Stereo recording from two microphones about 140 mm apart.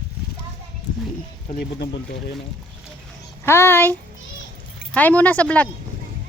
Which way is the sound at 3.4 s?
15° left (ahead or behind).